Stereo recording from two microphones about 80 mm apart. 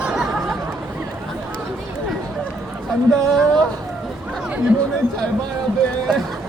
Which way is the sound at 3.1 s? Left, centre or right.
Centre.